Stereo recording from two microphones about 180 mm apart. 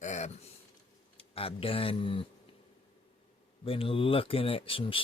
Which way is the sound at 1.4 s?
30° left (ahead or behind).